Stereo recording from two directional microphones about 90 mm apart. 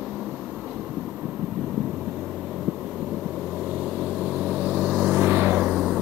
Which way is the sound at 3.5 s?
5° right (ahead or behind).